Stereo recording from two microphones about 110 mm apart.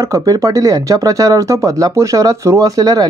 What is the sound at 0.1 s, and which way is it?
Speech, 35° right (ahead or behind).